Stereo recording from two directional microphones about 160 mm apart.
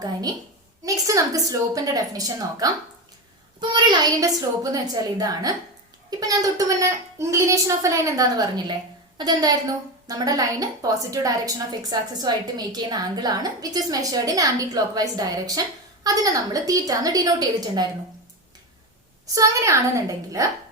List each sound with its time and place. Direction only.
0.0 s a woman's voice: 25° right (ahead or behind)
19.3 s a woman's voice: 20° right (ahead or behind)